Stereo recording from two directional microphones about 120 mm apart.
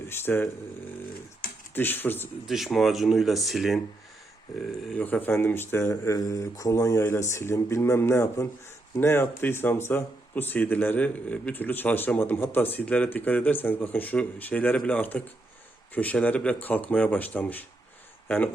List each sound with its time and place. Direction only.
0.1 s speech: 20° left (ahead or behind)
1.7 s speech: 15° left (ahead or behind)
2.5 s speech: centre (ahead or behind)
4.9 s speech: 15° left (ahead or behind)